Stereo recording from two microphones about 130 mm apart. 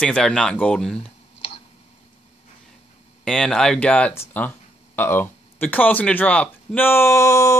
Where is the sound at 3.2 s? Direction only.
5° left (ahead or behind).